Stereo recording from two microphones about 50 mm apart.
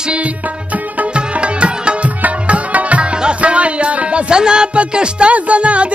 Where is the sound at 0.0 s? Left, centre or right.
Right.